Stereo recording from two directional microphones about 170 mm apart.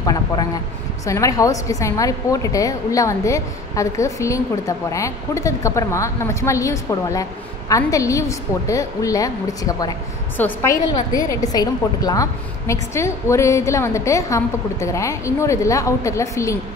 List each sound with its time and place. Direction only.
0.0 s a woman's voice: 25° left (ahead or behind)